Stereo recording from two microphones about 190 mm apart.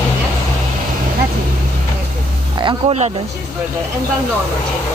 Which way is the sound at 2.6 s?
30° right (ahead or behind).